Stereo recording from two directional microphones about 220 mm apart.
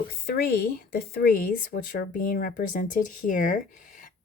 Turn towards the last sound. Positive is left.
turn(degrees=35)  # may be behind; listen again after turning